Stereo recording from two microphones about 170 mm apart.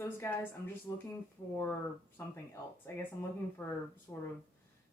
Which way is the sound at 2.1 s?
10° left (ahead or behind).